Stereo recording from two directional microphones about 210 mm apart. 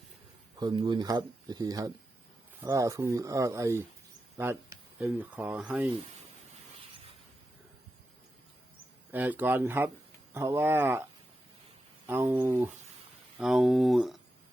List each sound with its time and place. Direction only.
0.6 s speech: 20° right (ahead or behind)
9.1 s speech: 10° right (ahead or behind)
12.0 s speech: 10° right (ahead or behind)